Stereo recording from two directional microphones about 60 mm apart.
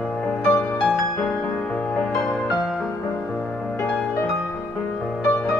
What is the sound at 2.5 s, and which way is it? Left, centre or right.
Music, centre.